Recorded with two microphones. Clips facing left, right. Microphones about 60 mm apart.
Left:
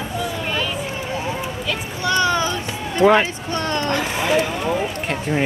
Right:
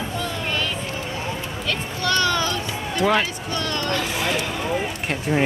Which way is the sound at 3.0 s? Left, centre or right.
Left.